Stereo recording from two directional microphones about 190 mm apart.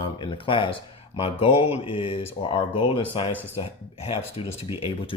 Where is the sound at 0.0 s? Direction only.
25° left (ahead or behind).